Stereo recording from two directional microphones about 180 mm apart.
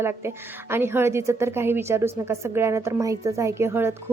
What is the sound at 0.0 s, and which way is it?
A woman's voice, 15° right (ahead or behind).